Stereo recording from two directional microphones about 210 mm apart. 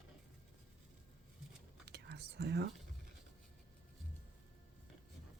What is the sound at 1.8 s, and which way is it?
Whispering, 50° right (ahead or behind).